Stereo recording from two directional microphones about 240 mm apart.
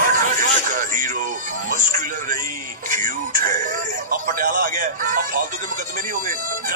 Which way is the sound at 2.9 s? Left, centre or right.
Right.